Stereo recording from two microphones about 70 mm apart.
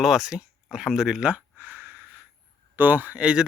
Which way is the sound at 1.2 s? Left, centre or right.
Right.